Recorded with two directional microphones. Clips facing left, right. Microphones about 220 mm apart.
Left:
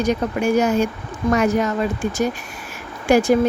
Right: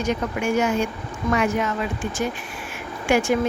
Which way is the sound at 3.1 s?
35° left (ahead or behind).